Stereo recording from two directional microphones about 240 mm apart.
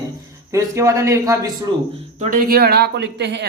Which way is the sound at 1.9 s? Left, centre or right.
Right.